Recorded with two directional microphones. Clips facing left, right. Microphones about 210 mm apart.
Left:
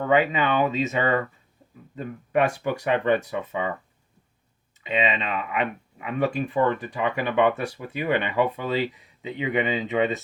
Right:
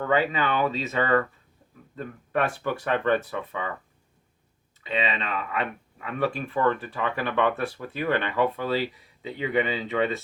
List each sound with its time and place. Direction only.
0.0 s speech: 20° left (ahead or behind)
2.3 s speech: 15° left (ahead or behind)
4.9 s speech: 15° left (ahead or behind)